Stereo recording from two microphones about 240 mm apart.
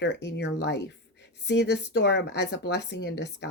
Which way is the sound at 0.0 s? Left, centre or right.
Left.